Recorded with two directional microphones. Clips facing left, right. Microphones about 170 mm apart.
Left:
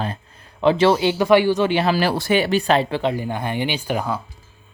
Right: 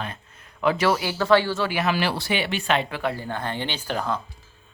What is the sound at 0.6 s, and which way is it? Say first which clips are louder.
Speech: left 6 dB; 25° left (ahead or behind).